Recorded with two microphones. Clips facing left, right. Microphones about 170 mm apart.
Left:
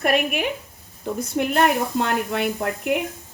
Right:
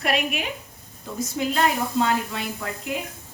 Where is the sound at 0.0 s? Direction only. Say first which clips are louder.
Left 4 dB; 55° left (ahead or behind).